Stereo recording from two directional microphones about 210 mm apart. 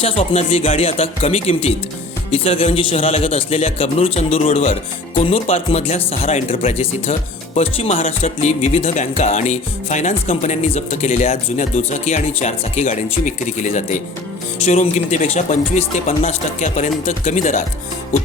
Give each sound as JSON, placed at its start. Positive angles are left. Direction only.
{"t": 0.0, "sound": "speech", "side_deg": 25}
{"t": 8.0, "sound": "music", "side_deg": 30}